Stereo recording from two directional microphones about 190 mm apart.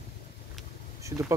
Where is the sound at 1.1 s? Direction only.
15° right (ahead or behind).